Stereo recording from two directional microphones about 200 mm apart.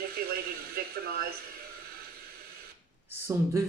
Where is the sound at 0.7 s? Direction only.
50° right (ahead or behind).